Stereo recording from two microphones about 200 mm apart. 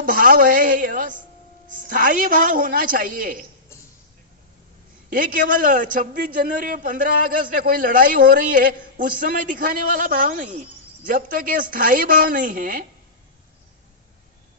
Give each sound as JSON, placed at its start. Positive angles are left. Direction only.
{"t": 0.0, "sound": "a woman's voice", "side_deg": -45}
{"t": 5.1, "sound": "a man's voice", "side_deg": -45}